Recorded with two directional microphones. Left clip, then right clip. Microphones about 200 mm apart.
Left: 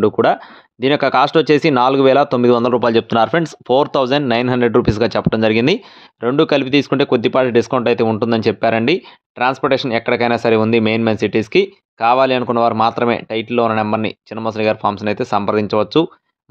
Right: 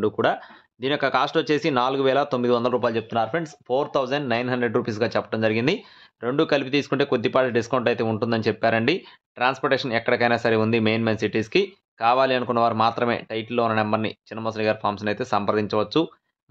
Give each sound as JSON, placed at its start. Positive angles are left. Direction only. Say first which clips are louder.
{"t": 0.0, "sound": "speech", "louder": "left 8 dB", "side_deg": 35}